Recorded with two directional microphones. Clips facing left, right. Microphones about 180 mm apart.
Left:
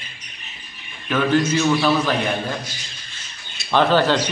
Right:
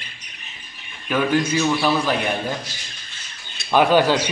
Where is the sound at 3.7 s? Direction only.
10° right (ahead or behind).